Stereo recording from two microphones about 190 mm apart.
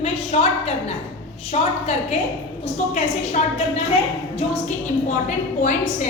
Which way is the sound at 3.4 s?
35° left (ahead or behind).